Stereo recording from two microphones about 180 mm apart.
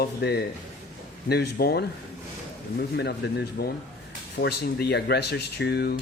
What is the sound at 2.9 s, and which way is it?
Speech, 65° left (ahead or behind).